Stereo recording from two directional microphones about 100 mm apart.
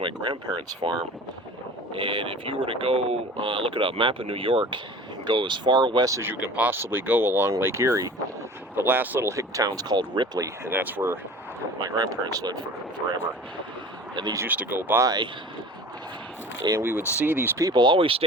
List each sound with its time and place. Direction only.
0.0 s speech: 60° right (ahead or behind)
5.2 s speech: 50° right (ahead or behind)
6.1 s speech: 30° right (ahead or behind)
6.3 s speech: 15° right (ahead or behind)
8.7 s speech: 20° right (ahead or behind); by 10.4 s 50° right (ahead or behind)
10.4 s speech: 25° right (ahead or behind)
11.8 s speech: 40° right (ahead or behind)
14.4 s speech: 15° right (ahead or behind)
15.0 s speech: 40° right (ahead or behind)
16.8 s speech: 20° right (ahead or behind)
17.6 s speech: 45° right (ahead or behind)